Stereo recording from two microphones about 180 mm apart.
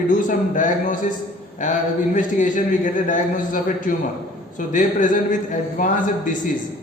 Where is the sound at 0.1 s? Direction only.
45° left (ahead or behind).